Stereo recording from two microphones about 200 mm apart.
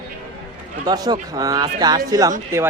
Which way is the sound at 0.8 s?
20° right (ahead or behind).